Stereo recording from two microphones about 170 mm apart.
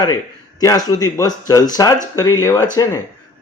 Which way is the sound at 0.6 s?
20° left (ahead or behind).